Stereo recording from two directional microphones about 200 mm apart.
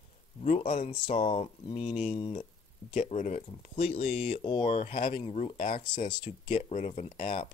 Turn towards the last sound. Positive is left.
turn(degrees=30)  # may be behind; listen again after turning